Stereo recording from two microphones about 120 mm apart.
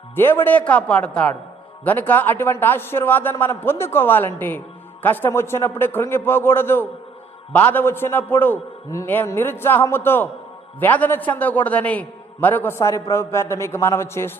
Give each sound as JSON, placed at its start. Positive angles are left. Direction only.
{"t": 0.2, "sound": "a man's voice", "side_deg": 15}